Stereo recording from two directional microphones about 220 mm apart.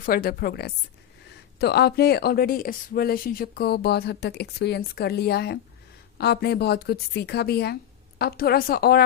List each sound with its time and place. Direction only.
0.0 s a woman's voice: 40° left (ahead or behind)